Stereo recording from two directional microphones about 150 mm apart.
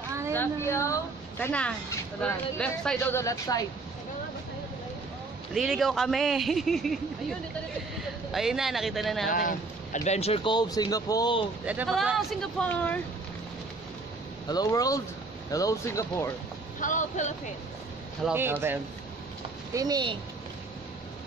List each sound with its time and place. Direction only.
0.3 s speech: 15° left (ahead or behind)
3.2 s speech: 25° left (ahead or behind)
5.5 s a man's voice: centre (ahead or behind)
8.3 s a man's voice: centre (ahead or behind)
9.3 s speech: 65° left (ahead or behind); by 11.4 s 30° left (ahead or behind)
11.6 s a man's voice: 10° right (ahead or behind); by 13.0 s 10° left (ahead or behind)
14.5 s speech: 25° left (ahead or behind)
16.8 s speech: 60° left (ahead or behind)
18.3 s speech: 15° right (ahead or behind)
19.7 s a woman's voice: 25° right (ahead or behind)